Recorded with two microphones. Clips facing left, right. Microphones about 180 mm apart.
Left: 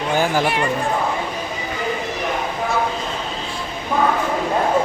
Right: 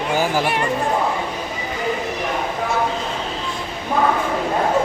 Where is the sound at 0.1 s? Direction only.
5° right (ahead or behind).